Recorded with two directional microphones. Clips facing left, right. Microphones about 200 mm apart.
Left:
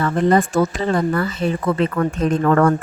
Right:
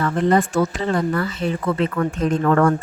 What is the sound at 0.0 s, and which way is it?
Speech, 35° left (ahead or behind).